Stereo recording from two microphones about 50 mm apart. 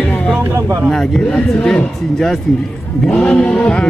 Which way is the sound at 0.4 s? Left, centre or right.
Right.